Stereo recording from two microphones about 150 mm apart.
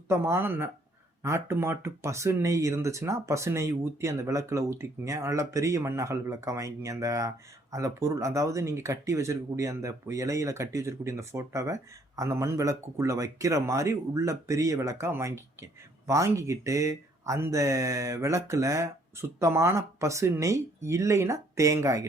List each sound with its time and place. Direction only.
0.1 s speech: 15° right (ahead or behind)